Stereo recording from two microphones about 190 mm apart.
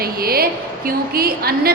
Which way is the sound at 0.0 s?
50° right (ahead or behind).